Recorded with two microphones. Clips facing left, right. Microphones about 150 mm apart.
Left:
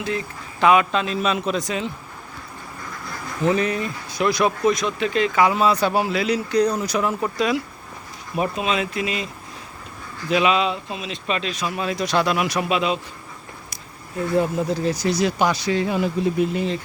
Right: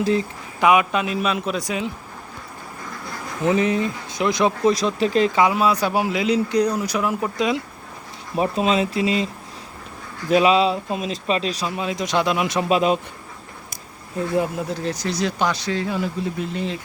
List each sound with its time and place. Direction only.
0.0 s speech: 30° right (ahead or behind)
0.6 s a man's voice: 15° right (ahead or behind)
3.4 s speech: 20° right (ahead or behind); by 5.4 s 35° right (ahead or behind)
5.5 s a man's voice: 10° right (ahead or behind)
6.7 s a man's voice: 5° right (ahead or behind)
8.4 s speech: 35° right (ahead or behind)
11.8 s speech: 20° right (ahead or behind)
12.6 s speech: 40° right (ahead or behind)
14.7 s speech: 5° left (ahead or behind)